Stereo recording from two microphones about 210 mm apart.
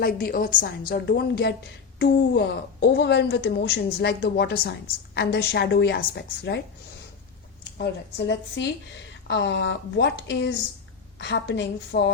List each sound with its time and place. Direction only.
0.0 s a woman's voice: 45° left (ahead or behind)
8.3 s speech: 55° left (ahead or behind)